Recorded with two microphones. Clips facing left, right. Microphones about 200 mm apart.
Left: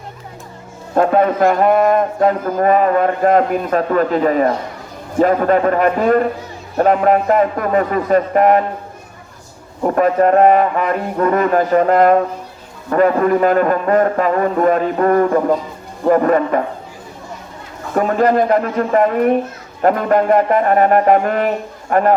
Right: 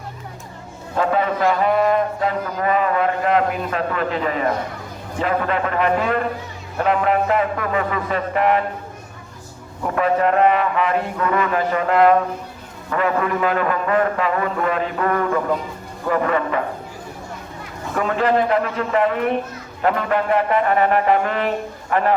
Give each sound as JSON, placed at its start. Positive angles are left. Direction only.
{"t": 0.9, "sound": "speech", "side_deg": 50}
{"t": 9.8, "sound": "speech", "side_deg": 40}
{"t": 17.9, "sound": "speech", "side_deg": 45}